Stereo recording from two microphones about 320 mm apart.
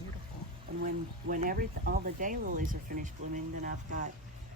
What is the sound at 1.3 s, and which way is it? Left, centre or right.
Speech, right.